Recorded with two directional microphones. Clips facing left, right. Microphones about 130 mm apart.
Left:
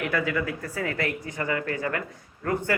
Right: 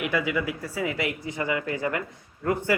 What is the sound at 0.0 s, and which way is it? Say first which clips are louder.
Speech: even; 15° right (ahead or behind).